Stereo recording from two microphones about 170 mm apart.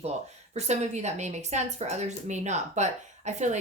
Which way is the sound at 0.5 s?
40° right (ahead or behind).